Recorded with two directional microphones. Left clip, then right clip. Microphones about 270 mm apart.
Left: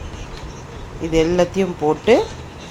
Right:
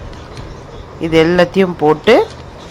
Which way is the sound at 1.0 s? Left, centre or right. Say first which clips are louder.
Right 6 dB; centre.